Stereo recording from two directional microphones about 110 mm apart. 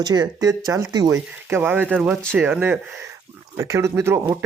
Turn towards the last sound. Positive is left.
turn(degrees=-25)  # may be behind; listen again after turning